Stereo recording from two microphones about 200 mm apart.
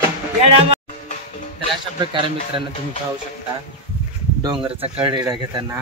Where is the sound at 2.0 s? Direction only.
25° right (ahead or behind).